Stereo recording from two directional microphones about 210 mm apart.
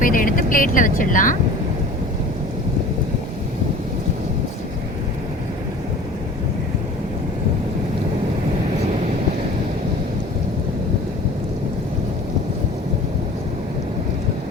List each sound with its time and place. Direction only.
0.0 s vehicle: 40° left (ahead or behind)